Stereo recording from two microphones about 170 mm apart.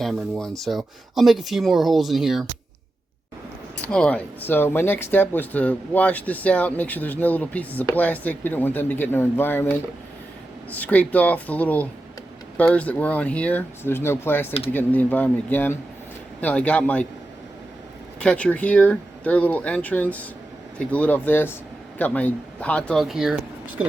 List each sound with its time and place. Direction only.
0.0 s speech: centre (ahead or behind)
3.8 s speech: 5° left (ahead or behind)
18.2 s speech: 5° left (ahead or behind)